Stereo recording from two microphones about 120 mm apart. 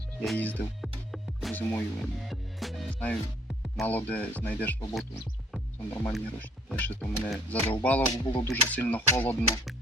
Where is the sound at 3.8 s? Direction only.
15° left (ahead or behind).